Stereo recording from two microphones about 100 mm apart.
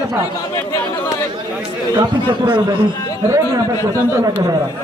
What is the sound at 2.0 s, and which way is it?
Speech, 50° right (ahead or behind).